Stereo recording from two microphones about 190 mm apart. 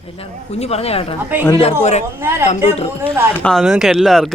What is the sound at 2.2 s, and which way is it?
Speech, 15° right (ahead or behind).